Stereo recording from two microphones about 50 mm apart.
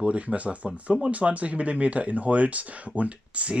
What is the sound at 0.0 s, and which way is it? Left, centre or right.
Speech, right.